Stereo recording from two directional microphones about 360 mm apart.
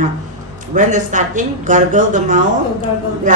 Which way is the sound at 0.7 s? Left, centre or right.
Right.